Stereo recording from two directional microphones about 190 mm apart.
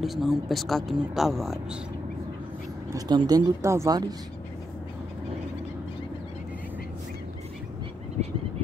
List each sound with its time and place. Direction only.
0.0 s speech: centre (ahead or behind)
2.9 s speech: 20° right (ahead or behind)